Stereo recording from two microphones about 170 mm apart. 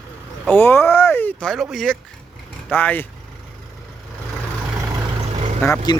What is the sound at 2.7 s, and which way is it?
Speech, 10° left (ahead or behind).